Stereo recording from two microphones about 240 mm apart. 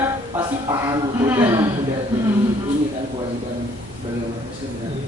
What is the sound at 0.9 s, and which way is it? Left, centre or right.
Speech, centre.